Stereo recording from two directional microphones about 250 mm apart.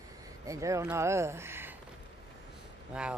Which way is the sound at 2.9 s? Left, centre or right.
Centre.